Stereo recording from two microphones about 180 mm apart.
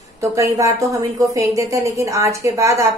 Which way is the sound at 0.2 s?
15° right (ahead or behind).